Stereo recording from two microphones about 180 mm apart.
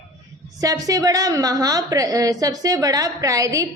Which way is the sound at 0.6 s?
20° right (ahead or behind).